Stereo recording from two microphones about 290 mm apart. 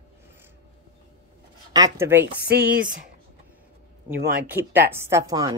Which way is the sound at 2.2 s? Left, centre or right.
Right.